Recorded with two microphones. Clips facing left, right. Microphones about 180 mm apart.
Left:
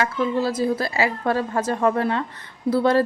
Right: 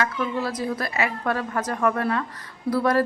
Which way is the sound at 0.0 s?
25° left (ahead or behind).